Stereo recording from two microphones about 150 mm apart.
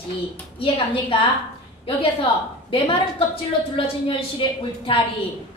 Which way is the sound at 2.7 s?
40° left (ahead or behind).